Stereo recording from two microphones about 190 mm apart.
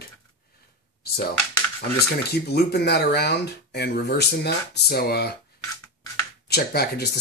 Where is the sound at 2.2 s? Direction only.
60° left (ahead or behind).